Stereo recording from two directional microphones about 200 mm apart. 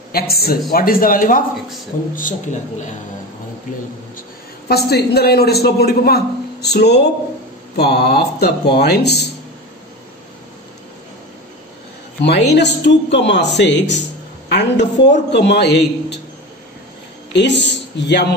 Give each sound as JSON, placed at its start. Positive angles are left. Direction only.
{"t": 0.1, "sound": "a man's voice", "side_deg": 50}
{"t": 4.6, "sound": "a man's voice", "side_deg": 50}
{"t": 12.2, "sound": "speech", "side_deg": 60}
{"t": 17.3, "sound": "a man's voice", "side_deg": 60}